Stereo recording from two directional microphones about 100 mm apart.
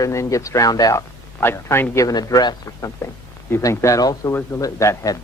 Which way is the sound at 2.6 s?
30° left (ahead or behind).